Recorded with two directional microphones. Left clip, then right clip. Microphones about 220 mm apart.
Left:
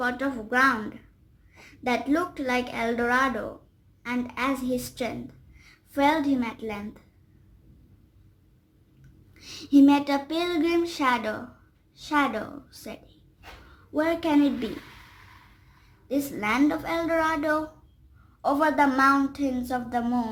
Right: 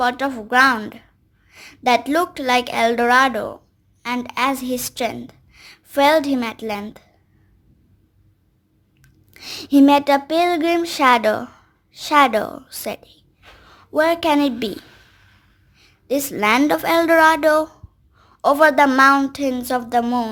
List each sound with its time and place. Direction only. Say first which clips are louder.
0.0 s a woman's voice: right 8 dB; 45° right (ahead or behind)
9.0 s a sound: right 11 dB; 50° right (ahead or behind)
13.9 s a woman's voice: right 8 dB; 50° right (ahead or behind)
16.0 s a woman's voice: right 9 dB; 45° right (ahead or behind)